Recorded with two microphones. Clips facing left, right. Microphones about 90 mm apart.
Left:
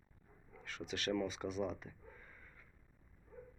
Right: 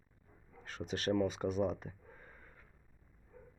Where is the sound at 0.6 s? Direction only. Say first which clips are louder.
Right 4 dB; 40° right (ahead or behind).